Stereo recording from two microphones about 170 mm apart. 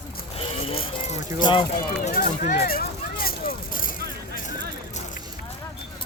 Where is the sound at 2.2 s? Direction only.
55° left (ahead or behind).